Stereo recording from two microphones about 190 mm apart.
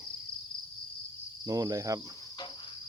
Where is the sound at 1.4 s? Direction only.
20° right (ahead or behind).